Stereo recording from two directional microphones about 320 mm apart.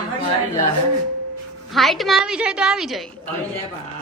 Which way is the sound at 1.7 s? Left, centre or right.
Centre.